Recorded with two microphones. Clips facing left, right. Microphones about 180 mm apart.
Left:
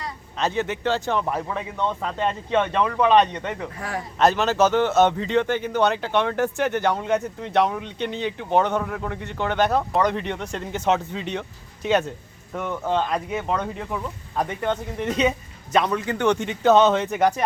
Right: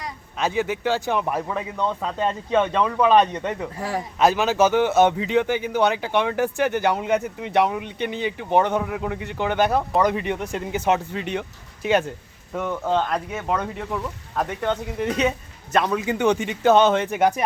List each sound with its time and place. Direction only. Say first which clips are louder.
0.0 s speech: even; 5° right (ahead or behind)
3.8 s a man's voice: right 3 dB; 25° right (ahead or behind)
4.2 s speech: even; 5° right (ahead or behind)